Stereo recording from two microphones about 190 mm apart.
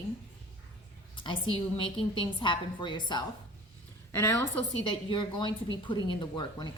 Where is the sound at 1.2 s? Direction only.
25° left (ahead or behind).